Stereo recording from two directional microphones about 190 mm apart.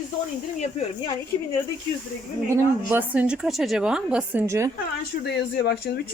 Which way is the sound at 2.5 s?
10° right (ahead or behind).